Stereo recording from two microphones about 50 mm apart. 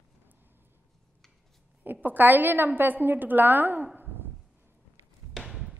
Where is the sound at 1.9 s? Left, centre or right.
Right.